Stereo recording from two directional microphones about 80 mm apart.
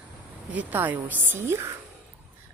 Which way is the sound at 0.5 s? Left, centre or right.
Right.